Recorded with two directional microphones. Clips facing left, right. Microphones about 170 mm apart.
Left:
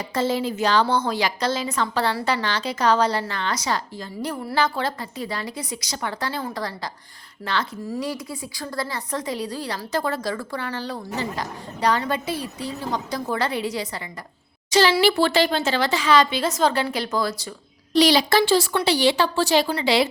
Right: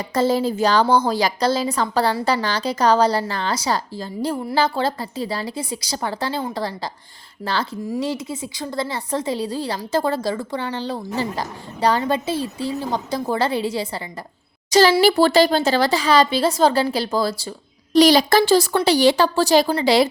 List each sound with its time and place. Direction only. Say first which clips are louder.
0.1 s a woman's voice: right 5 dB; 40° right (ahead or behind)
14.7 s a child's voice: right 4 dB; 40° right (ahead or behind)
17.9 s a woman's voice: right 4 dB; 45° right (ahead or behind)